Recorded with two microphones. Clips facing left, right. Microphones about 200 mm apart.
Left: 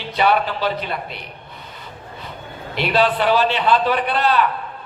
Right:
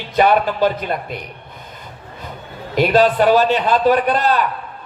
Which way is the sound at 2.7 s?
45° right (ahead or behind).